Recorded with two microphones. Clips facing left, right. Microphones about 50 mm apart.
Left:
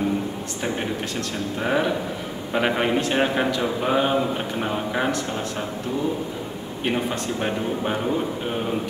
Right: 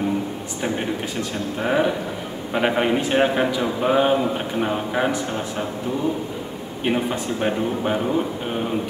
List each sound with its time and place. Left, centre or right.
1.6 s speech: centre
6.8 s speech: centre